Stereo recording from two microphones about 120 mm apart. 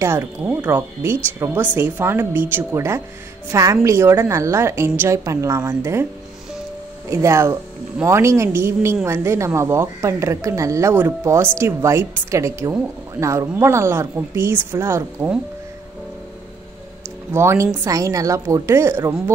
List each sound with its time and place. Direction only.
0.0 s a woman's voice: 20° right (ahead or behind)
7.1 s a woman's voice: 25° right (ahead or behind)
17.3 s a woman's voice: 25° right (ahead or behind)